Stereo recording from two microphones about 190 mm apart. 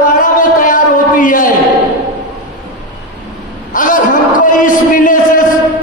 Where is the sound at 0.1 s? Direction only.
45° left (ahead or behind).